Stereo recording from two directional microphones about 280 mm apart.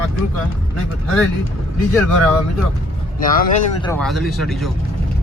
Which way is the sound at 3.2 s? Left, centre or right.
Left.